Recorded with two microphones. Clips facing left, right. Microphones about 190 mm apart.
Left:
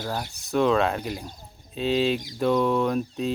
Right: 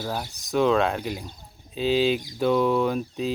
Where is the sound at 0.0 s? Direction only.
10° right (ahead or behind).